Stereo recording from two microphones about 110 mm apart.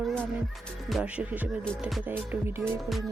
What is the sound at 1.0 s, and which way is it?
Speech, 10° right (ahead or behind).